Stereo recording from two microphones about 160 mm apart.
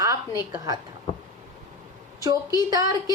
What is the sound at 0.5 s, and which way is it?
Speech, 20° right (ahead or behind).